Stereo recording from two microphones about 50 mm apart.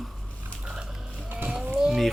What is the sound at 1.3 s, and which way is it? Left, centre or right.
Vehicle, right.